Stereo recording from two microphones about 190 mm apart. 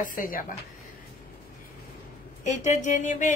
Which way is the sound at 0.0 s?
45° left (ahead or behind).